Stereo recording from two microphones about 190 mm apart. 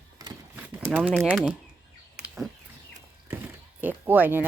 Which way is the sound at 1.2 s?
Centre (ahead or behind).